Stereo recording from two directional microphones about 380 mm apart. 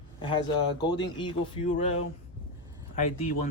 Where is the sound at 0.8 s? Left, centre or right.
Centre.